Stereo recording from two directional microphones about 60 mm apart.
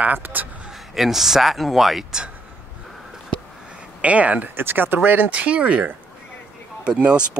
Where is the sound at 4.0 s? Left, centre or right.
Right.